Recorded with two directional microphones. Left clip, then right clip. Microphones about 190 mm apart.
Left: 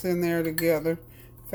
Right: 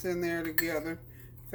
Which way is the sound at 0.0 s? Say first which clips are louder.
Left 6 dB; 55° left (ahead or behind).